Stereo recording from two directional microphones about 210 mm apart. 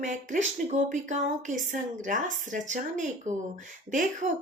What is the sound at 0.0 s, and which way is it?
Speech, 35° right (ahead or behind).